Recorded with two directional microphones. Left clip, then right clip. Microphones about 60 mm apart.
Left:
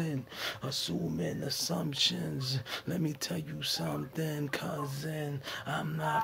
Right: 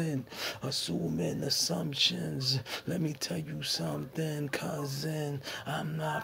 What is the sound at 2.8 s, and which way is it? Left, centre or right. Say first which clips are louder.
Speech: right 1 dB; left.